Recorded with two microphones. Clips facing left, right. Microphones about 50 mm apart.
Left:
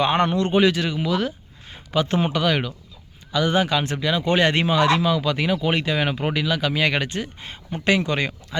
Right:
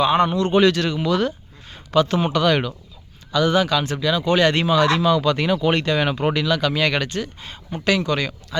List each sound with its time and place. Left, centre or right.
0.0 s a man's voice: left
0.5 s speech: centre
1.7 s a sound: centre
2.0 s speech: left
2.3 s speech: centre
3.3 s speech: left
5.0 s speech: centre; by 8.5 s left